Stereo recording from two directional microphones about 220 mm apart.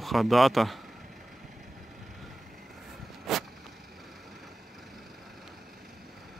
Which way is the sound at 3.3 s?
Centre (ahead or behind).